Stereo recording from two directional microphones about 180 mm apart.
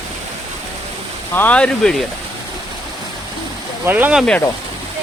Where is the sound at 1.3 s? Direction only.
10° left (ahead or behind).